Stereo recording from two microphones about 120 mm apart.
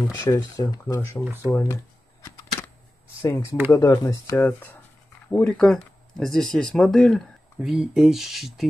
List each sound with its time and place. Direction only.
0.2 s speech: 25° left (ahead or behind)
1.2 s speech: 15° right (ahead or behind)
1.5 s speech: 25° left (ahead or behind)
3.2 s speech: 20° left (ahead or behind)
4.5 s speech: 15° left (ahead or behind); by 8.6 s centre (ahead or behind)